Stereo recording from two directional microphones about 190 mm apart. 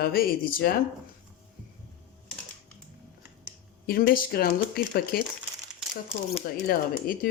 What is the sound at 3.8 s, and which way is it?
Speech, 50° left (ahead or behind).